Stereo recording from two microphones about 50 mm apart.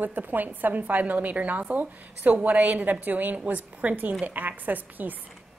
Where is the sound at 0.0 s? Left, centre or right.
Right.